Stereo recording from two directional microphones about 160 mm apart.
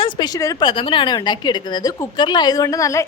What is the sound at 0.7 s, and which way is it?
A woman's voice, 35° left (ahead or behind).